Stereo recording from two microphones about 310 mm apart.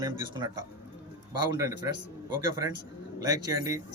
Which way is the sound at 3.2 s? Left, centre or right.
Centre.